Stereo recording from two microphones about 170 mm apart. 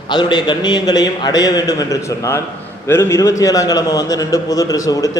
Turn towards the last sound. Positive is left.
turn(degrees=20)  # may be behind; listen again after turning